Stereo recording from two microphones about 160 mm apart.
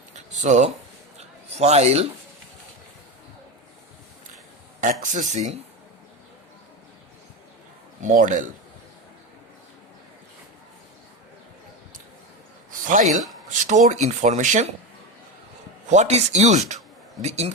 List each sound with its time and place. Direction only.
0.3 s a man's voice: 50° right (ahead or behind)
4.8 s speech: 50° right (ahead or behind)
8.0 s speech: 55° right (ahead or behind)
12.8 s speech: 55° right (ahead or behind)
15.9 s speech: 45° right (ahead or behind)